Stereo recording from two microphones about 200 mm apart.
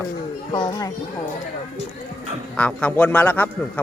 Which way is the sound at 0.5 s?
15° left (ahead or behind).